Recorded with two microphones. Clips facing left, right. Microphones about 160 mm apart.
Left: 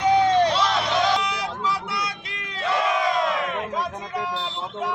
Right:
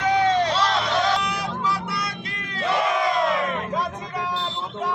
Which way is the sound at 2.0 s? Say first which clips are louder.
Right 1 dB; 55° right (ahead or behind).